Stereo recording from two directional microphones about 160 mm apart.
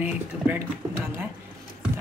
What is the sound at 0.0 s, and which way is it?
Speech, 10° right (ahead or behind).